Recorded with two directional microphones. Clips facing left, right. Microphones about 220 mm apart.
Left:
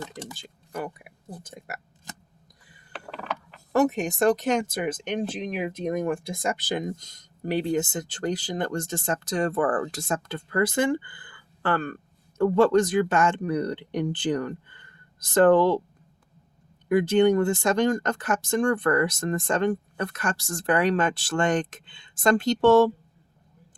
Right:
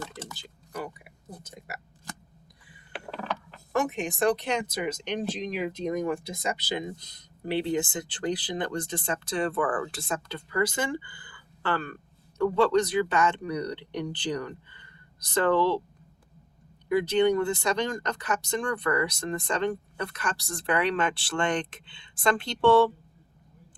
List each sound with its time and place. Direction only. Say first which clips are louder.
0.3 s speech: left 3 dB; 50° left (ahead or behind)
3.7 s speech: left 6 dB; 40° left (ahead or behind)
16.9 s speech: left 3 dB; 50° left (ahead or behind)